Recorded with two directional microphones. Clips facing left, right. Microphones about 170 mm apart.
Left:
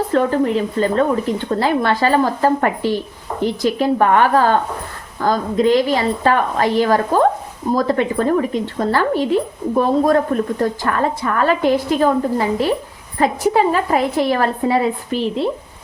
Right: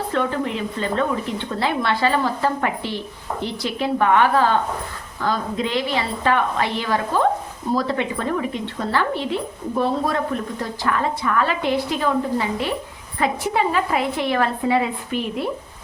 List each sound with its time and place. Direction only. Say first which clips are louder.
0.1 s a woman's voice: left 7 dB; 40° left (ahead or behind)